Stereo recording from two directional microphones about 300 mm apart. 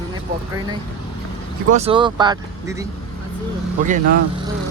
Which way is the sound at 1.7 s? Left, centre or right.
Centre.